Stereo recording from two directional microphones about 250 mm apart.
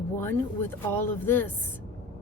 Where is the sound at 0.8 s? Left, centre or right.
Centre.